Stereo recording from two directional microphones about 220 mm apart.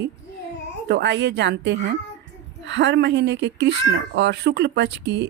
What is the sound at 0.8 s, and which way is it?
Speech, 50° right (ahead or behind).